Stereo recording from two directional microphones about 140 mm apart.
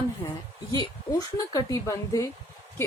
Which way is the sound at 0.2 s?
30° left (ahead or behind).